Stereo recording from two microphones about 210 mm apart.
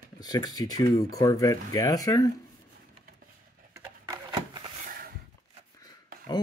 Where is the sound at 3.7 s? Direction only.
15° right (ahead or behind).